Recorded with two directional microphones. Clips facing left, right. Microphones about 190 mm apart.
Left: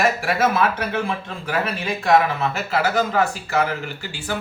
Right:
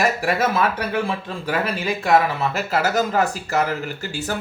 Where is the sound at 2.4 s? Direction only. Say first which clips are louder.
Even; 40° right (ahead or behind).